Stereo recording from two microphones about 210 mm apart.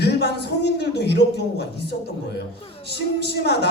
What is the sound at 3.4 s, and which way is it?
Speech, 50° left (ahead or behind).